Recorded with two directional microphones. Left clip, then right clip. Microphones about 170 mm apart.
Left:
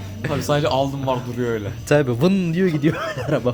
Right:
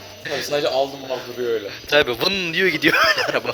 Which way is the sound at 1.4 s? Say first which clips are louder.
Right 5 dB; 20° left (ahead or behind).